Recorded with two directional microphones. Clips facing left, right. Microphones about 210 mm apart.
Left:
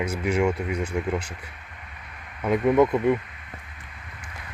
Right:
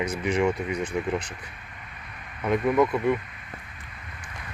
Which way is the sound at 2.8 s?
25° left (ahead or behind).